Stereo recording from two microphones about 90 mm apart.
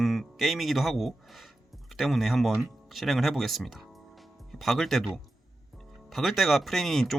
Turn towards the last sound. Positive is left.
turn(degrees=0)  # may be behind; listen again after turning